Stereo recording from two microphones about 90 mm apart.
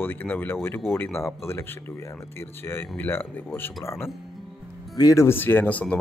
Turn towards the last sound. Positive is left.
turn(degrees=15)  # may be behind; listen again after turning